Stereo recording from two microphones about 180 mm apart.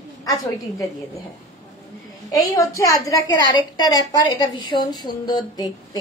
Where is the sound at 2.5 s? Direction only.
20° left (ahead or behind).